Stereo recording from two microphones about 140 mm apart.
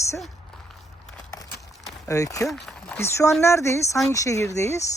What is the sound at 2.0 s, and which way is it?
Speech, 25° left (ahead or behind).